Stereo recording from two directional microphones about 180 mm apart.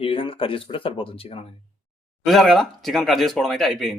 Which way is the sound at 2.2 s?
Centre (ahead or behind).